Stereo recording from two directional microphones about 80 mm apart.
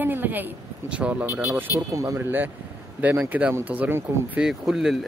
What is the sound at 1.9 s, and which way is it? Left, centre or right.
Speech, right.